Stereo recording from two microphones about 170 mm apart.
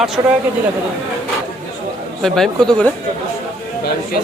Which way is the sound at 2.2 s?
5° left (ahead or behind).